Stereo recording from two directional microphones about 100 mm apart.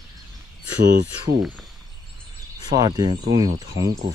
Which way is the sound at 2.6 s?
40° right (ahead or behind).